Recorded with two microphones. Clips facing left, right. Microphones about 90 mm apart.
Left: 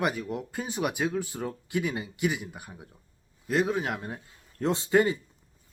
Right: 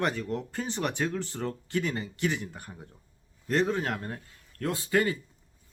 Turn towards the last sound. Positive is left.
turn(degrees=20)  # may be behind; listen again after turning